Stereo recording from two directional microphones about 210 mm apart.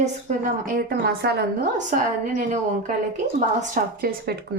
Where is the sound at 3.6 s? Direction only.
45° right (ahead or behind).